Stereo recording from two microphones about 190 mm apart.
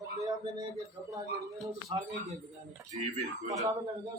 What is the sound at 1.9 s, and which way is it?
Speech, 30° right (ahead or behind).